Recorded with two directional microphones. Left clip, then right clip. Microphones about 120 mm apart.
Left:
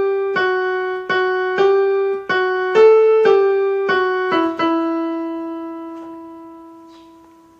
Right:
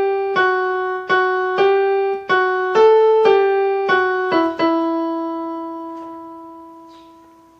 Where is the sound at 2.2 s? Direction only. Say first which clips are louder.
Right 1 dB; 25° right (ahead or behind).